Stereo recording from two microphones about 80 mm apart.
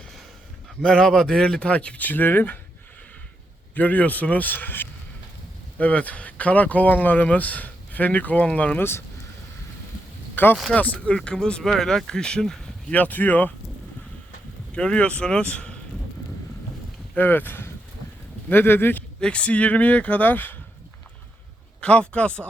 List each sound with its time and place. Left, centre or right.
0.8 s speech: centre; by 2.6 s left
3.8 s speech: left
10.3 s speech: left
11.0 s speech: centre
12.9 s speech: left
14.7 s speech: centre
17.2 s speech: left
19.2 s speech: centre
21.8 s speech: centre